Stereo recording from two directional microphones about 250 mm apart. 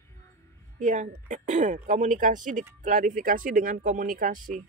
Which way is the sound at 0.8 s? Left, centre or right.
Right.